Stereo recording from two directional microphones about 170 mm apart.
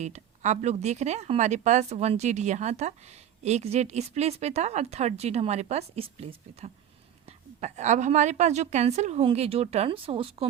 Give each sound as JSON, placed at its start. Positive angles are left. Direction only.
{"t": 0.0, "sound": "a woman's voice", "side_deg": -40}